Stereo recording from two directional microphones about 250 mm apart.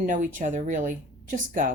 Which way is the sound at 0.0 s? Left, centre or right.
Right.